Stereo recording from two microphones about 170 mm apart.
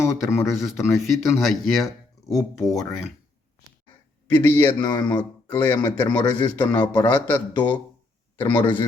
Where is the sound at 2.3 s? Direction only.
20° left (ahead or behind).